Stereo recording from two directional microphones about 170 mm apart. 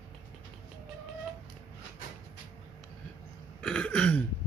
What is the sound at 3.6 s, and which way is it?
Throat clearing, 5° left (ahead or behind).